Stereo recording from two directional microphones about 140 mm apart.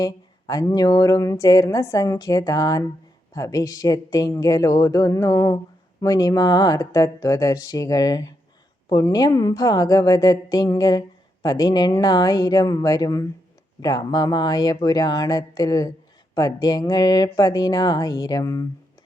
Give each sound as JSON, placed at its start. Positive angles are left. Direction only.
{"t": 0.0, "sound": "speech", "side_deg": 25}